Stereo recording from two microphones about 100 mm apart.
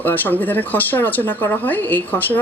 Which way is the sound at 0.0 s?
20° left (ahead or behind).